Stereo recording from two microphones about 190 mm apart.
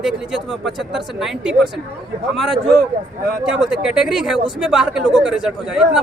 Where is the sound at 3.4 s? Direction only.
Centre (ahead or behind).